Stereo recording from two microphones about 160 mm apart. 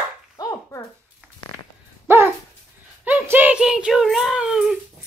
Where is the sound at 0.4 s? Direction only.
25° left (ahead or behind).